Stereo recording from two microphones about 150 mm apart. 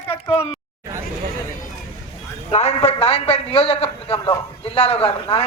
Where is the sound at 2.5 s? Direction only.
45° left (ahead or behind).